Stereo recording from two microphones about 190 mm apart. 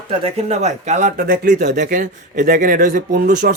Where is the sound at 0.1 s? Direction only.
35° right (ahead or behind).